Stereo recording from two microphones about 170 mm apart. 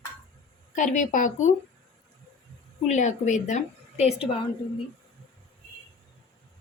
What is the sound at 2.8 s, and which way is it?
A woman's voice, 45° left (ahead or behind).